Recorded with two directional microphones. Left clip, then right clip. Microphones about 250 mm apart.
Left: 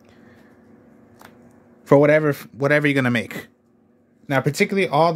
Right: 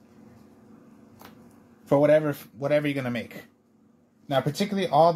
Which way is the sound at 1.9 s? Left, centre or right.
Left.